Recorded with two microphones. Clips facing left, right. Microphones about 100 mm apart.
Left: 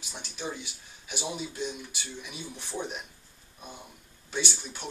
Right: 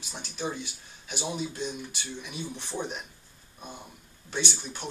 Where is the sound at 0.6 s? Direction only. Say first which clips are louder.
Right 4 dB; 10° left (ahead or behind).